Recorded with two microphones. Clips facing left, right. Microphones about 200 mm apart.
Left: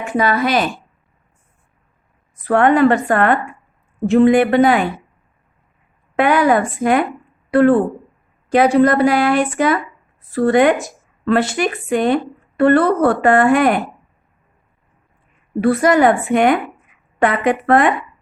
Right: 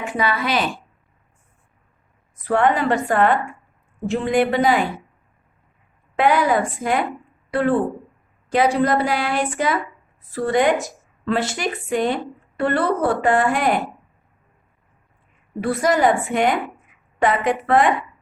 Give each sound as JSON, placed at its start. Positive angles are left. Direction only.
{"t": 0.0, "sound": "a woman's voice", "side_deg": 45}
{"t": 2.5, "sound": "speech", "side_deg": 60}
{"t": 6.1, "sound": "speech", "side_deg": 60}
{"t": 8.5, "sound": "speech", "side_deg": 55}
{"t": 15.6, "sound": "speech", "side_deg": 60}